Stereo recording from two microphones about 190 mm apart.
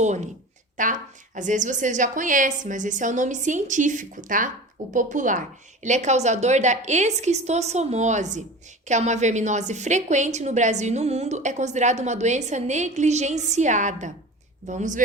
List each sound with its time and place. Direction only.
0.0 s a woman's voice: 40° right (ahead or behind)